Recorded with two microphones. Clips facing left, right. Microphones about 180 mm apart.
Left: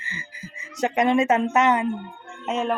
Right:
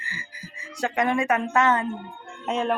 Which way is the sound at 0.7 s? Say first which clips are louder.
Left 4 dB; 20° left (ahead or behind).